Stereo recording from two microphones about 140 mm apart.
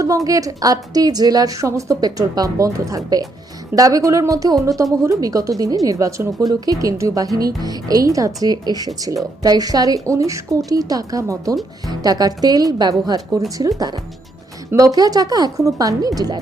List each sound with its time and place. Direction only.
0.3 s speech: 25° right (ahead or behind)